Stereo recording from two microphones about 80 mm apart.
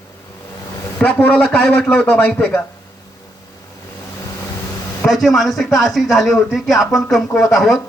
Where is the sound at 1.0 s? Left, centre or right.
Centre.